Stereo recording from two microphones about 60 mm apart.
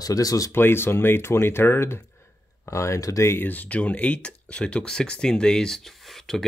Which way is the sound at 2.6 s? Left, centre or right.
Left.